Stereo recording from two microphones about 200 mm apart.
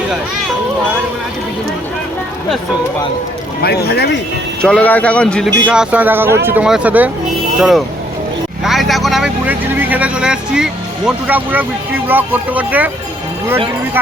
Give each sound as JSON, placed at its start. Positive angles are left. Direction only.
{"t": 3.6, "sound": "speech", "side_deg": 55}
{"t": 4.6, "sound": "speech", "side_deg": 5}
{"t": 8.6, "sound": "speech", "side_deg": 0}